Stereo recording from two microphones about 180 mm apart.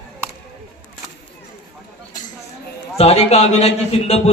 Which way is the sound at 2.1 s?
45° left (ahead or behind).